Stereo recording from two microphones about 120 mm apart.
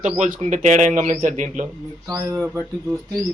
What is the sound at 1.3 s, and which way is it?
Speech, 90° right.